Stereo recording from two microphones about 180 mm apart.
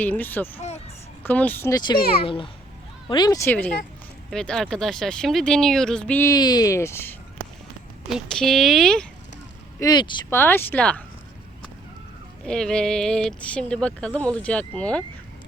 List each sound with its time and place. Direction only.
0.0 s speech: 10° left (ahead or behind)
1.9 s speech: 30° left (ahead or behind)
4.3 s speech: 5° left (ahead or behind)
6.3 s speech: 20° left (ahead or behind)
8.0 s speech: centre (ahead or behind)
9.8 s speech: 25° left (ahead or behind)
10.2 s speech: 15° left (ahead or behind)
12.5 s speech: 5° left (ahead or behind)